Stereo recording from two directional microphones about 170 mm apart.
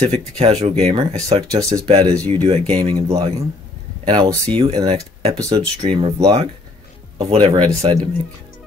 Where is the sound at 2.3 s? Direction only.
35° right (ahead or behind).